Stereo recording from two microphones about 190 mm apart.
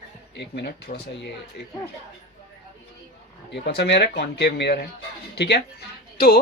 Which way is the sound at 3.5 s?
60° left (ahead or behind).